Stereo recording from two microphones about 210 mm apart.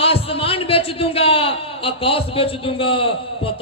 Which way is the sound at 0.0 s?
25° left (ahead or behind).